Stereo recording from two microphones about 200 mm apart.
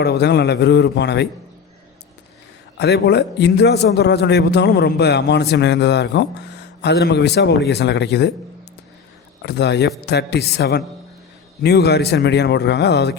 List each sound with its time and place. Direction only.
0.0 s a man's voice: 55° left (ahead or behind)
2.7 s a man's voice: 55° left (ahead or behind)
9.4 s a man's voice: 60° left (ahead or behind)